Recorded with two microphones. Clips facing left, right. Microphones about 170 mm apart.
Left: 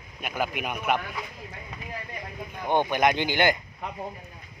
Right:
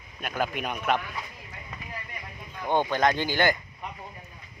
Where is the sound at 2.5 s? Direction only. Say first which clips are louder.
Left 1 dB; 15° left (ahead or behind).